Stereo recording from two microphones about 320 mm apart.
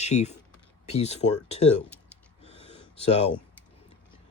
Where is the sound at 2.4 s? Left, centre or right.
Centre.